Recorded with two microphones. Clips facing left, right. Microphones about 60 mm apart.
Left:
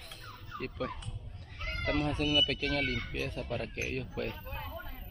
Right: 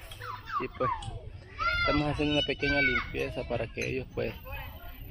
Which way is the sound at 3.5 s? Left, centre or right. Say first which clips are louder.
Right 3 dB; right.